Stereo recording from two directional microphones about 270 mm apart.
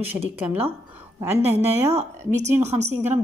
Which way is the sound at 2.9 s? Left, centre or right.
Centre.